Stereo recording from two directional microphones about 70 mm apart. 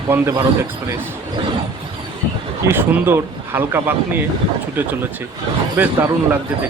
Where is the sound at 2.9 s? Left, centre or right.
Right.